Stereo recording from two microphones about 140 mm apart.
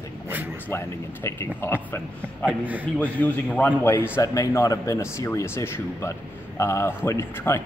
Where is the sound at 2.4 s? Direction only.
10° right (ahead or behind).